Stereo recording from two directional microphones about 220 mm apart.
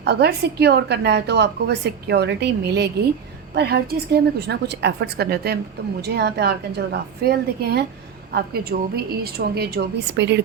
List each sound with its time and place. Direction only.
0.0 s a woman's voice: 50° right (ahead or behind)